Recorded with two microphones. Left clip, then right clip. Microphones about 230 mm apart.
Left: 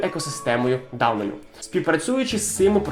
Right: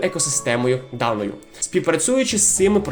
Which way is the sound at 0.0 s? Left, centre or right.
Right.